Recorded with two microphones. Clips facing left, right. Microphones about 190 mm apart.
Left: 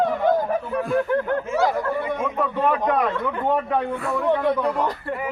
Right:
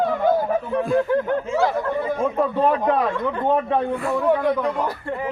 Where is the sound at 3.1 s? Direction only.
15° right (ahead or behind).